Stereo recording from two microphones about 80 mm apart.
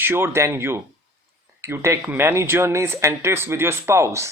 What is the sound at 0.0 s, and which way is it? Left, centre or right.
Speech, right.